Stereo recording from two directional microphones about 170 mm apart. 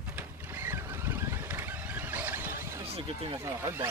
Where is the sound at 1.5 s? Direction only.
10° right (ahead or behind).